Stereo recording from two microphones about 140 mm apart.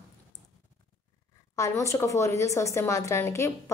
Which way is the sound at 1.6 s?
20° left (ahead or behind).